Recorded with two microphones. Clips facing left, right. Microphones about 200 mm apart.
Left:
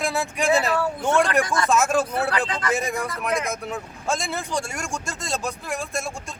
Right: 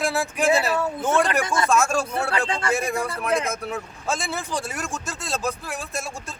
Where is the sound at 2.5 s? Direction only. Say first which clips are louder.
Right 1 dB; 30° right (ahead or behind).